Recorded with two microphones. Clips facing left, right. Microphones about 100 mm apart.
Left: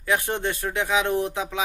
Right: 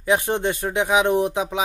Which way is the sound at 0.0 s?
20° right (ahead or behind).